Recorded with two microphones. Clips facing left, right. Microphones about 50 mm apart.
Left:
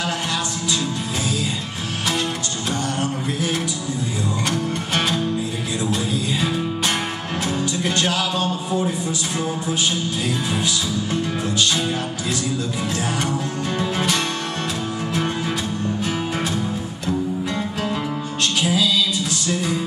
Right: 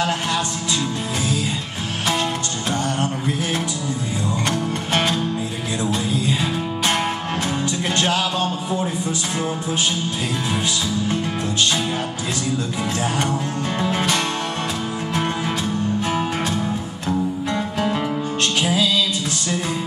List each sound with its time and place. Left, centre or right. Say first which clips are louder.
4.5 s music: right 1 dB; right
7.4 s music: left 3 dB; right
13.7 s music: right 1 dB; right
18.6 s music: even; right